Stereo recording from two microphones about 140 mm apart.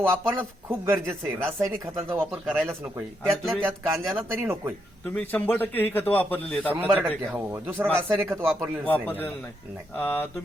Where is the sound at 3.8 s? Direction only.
20° right (ahead or behind).